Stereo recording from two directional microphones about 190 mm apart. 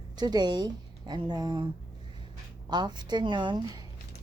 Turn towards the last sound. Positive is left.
turn(degrees=-20)  # may be behind; listen again after turning